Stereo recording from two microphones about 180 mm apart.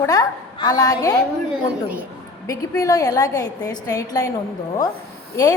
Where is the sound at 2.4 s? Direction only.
20° left (ahead or behind).